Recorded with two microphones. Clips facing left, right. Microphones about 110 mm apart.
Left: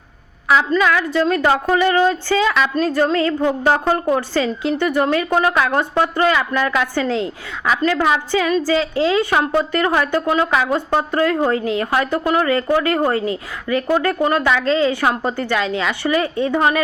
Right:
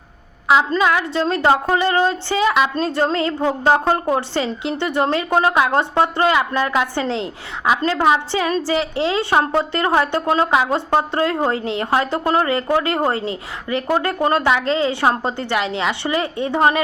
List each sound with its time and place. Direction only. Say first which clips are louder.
0.4 s a woman's voice: even; 25° right (ahead or behind)